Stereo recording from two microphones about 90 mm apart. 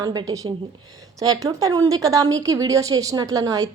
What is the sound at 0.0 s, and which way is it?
A woman's voice, 50° right (ahead or behind).